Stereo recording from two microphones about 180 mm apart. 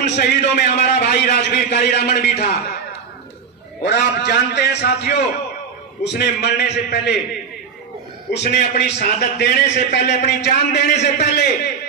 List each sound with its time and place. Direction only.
0.0 s a man's voice: 65° left (ahead or behind)
3.8 s a man's voice: 65° left (ahead or behind)
8.3 s a man's voice: 70° left (ahead or behind)